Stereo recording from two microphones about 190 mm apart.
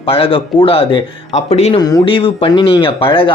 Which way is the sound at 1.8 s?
20° left (ahead or behind).